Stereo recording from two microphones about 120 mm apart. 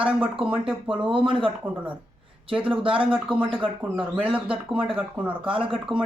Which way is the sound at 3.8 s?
10° right (ahead or behind).